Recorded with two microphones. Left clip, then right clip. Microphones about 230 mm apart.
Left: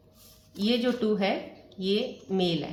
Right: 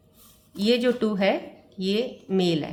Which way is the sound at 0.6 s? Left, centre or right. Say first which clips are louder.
Right 5 dB; right.